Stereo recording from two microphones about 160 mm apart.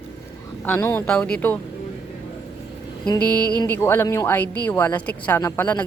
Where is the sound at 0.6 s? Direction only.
15° left (ahead or behind).